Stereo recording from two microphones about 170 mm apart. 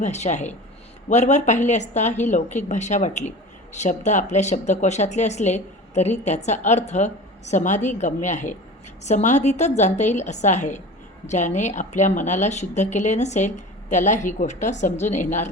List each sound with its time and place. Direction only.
0.0 s a woman's voice: 45° left (ahead or behind)